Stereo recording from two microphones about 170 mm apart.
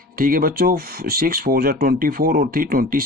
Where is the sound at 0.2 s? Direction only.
55° right (ahead or behind).